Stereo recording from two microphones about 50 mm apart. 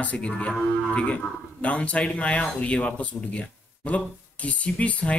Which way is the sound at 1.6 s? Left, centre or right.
Left.